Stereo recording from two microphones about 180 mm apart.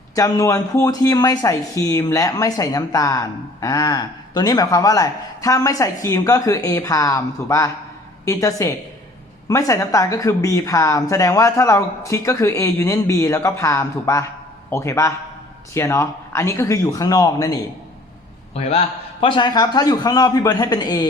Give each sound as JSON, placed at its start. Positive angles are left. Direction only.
{"t": 0.2, "sound": "a woman's voice", "side_deg": 20}
{"t": 18.5, "sound": "a man's voice", "side_deg": 35}